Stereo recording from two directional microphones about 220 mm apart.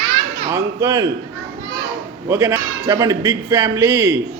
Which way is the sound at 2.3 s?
10° right (ahead or behind).